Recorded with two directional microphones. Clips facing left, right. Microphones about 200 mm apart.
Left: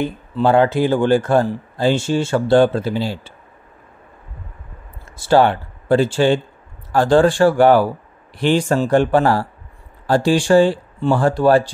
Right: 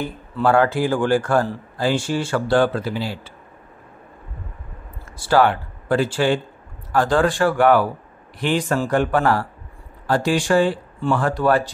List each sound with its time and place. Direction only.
0.0 s speech: 20° left (ahead or behind)
5.1 s speech: 25° left (ahead or behind)